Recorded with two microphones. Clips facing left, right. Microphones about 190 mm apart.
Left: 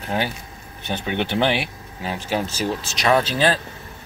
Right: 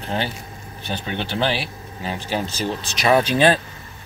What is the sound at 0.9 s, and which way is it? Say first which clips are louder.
Speech: left 3 dB; 20° left (ahead or behind).